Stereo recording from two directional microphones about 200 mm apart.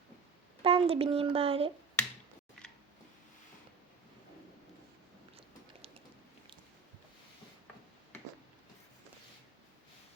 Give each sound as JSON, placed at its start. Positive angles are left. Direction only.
{"t": 0.6, "sound": "speech", "side_deg": -25}